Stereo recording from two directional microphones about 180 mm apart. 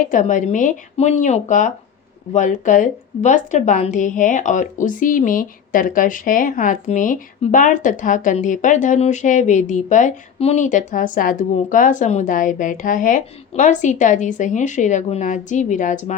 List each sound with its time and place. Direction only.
0.1 s a woman's voice: 45° left (ahead or behind)